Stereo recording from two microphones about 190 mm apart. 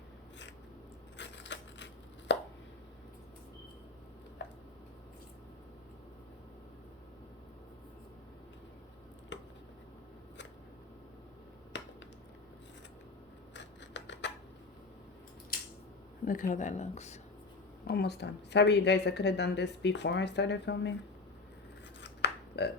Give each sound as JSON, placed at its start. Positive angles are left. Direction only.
{"t": 1.2, "sound": "tearing", "side_deg": 70}
{"t": 4.4, "sound": "a sound", "side_deg": 70}
{"t": 9.3, "sound": "a sound", "side_deg": 70}
{"t": 11.7, "sound": "finger snapping", "side_deg": 70}
{"t": 13.5, "sound": "scissors", "side_deg": 70}
{"t": 15.5, "sound": "scissors", "side_deg": 55}
{"t": 16.2, "sound": "speech", "side_deg": 45}
{"t": 17.8, "sound": "speech", "side_deg": 55}
{"t": 22.2, "sound": "a sound", "side_deg": 65}